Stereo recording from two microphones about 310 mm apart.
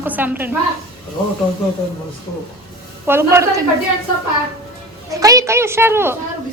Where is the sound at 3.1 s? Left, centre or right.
Centre.